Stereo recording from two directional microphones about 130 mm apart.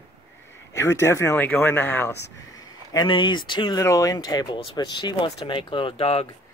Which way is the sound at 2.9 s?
40° left (ahead or behind).